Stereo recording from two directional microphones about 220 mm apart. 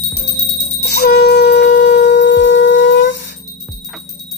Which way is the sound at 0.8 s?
45° left (ahead or behind).